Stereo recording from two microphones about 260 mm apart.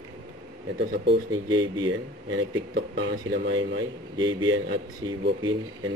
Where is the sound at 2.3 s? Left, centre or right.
Right.